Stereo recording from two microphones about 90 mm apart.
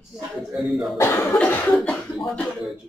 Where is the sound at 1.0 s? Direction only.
30° left (ahead or behind).